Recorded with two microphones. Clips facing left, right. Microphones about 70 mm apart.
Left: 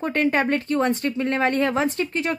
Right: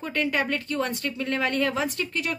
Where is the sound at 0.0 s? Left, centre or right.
Left.